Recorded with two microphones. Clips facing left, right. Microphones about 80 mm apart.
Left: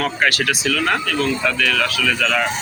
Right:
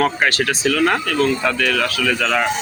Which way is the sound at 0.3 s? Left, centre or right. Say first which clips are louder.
Right 1 dB; right.